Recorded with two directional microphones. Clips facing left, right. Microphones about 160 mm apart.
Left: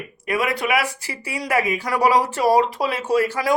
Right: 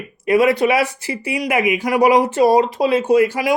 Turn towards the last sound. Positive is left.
turn(degrees=-15)  # may be behind; listen again after turning